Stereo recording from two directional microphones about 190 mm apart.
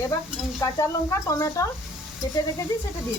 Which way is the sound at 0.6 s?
15° left (ahead or behind).